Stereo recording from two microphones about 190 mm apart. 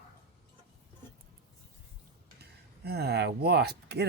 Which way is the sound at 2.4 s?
60° right (ahead or behind).